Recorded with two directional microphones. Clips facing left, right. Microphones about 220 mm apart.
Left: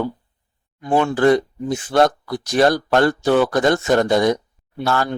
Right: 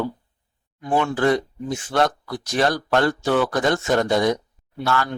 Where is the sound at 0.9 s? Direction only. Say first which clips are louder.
Left 4 dB; 35° left (ahead or behind).